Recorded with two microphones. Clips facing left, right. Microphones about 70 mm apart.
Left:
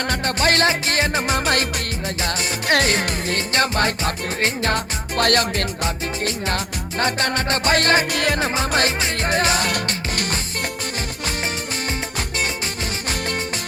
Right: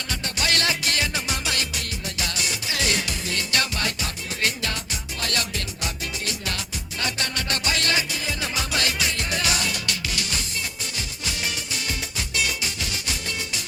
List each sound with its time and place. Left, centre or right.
0.1 s music: left
2.6 s music: left
5.1 s music: left
9.6 s music: left